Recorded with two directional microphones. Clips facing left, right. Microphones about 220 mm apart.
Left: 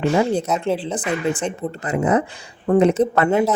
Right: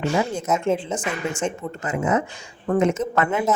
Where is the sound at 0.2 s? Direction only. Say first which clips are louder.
Left 4 dB; 35° left (ahead or behind).